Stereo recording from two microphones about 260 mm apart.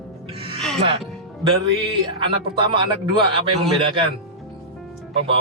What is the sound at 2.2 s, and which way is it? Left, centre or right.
Speech, centre.